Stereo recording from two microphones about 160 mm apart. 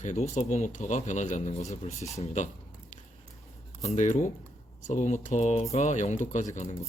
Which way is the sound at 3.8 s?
50° left (ahead or behind).